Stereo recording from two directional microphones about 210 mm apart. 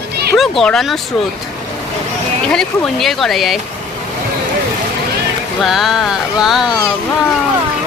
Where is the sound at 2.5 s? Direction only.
Centre (ahead or behind).